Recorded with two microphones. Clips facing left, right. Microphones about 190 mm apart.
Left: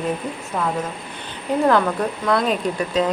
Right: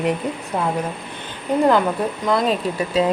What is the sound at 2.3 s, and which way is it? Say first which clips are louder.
Speech: right 1 dB; centre (ahead or behind).